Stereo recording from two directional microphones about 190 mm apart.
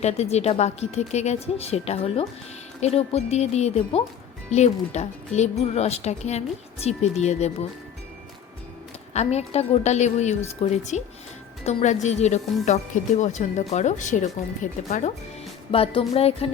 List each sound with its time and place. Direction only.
0.0 s speech: 35° left (ahead or behind)
9.1 s speech: 35° left (ahead or behind)
15.7 s speech: 30° left (ahead or behind)